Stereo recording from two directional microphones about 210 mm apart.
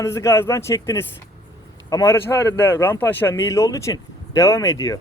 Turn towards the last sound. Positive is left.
turn(degrees=15)  # may be behind; listen again after turning